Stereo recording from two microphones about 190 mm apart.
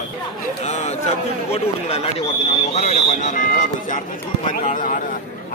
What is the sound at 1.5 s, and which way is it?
Speech, 30° left (ahead or behind).